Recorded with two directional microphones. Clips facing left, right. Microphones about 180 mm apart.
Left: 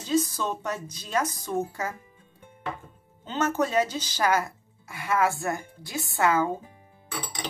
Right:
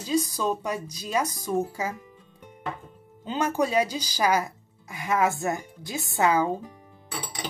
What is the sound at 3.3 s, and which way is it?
Speech, 15° right (ahead or behind).